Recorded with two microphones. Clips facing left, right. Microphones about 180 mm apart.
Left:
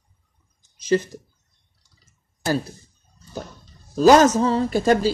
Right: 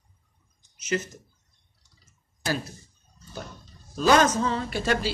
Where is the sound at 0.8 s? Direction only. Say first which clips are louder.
Left 8 dB; 35° left (ahead or behind).